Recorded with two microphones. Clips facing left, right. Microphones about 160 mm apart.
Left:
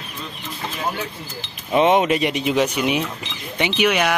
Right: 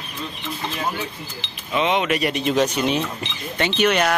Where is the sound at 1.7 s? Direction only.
50° left (ahead or behind).